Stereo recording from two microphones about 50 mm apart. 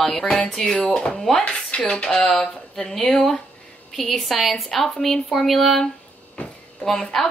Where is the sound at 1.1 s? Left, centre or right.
Centre.